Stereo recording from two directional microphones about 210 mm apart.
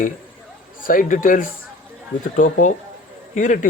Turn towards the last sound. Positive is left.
turn(degrees=40)  # may be behind; listen again after turning